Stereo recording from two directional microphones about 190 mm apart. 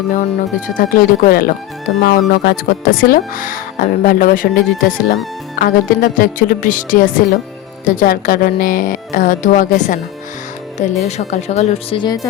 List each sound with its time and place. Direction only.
0.8 s speech: 45° left (ahead or behind); by 12.3 s 20° left (ahead or behind)